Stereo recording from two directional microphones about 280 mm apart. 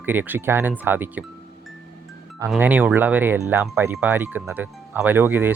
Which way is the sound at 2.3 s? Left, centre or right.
Centre.